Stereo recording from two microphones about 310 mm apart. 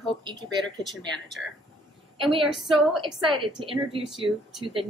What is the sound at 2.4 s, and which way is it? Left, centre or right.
A woman's voice, centre.